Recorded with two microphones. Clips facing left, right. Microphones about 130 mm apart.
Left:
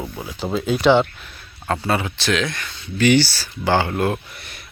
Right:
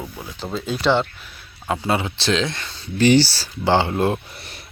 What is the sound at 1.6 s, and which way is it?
Speech, 15° right (ahead or behind).